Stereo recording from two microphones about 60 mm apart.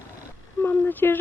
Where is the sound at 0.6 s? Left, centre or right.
Left.